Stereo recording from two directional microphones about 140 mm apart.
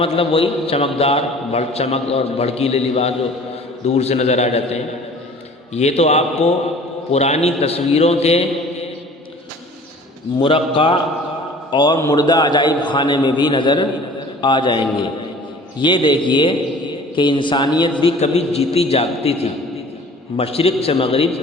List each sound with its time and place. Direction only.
0.0 s a man's voice: 40° left (ahead or behind)
10.4 s a man's voice: 35° left (ahead or behind)
18.0 s a man's voice: 50° left (ahead or behind)